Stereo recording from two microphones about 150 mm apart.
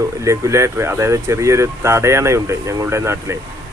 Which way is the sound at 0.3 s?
20° right (ahead or behind).